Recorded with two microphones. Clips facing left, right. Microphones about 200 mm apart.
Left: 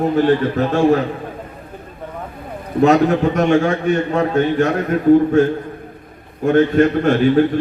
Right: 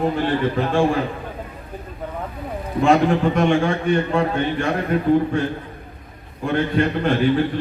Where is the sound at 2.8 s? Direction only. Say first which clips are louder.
Left 3 dB; 40° left (ahead or behind).